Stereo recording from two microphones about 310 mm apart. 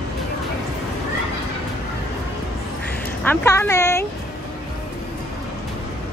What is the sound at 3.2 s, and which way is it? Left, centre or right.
Speech, centre.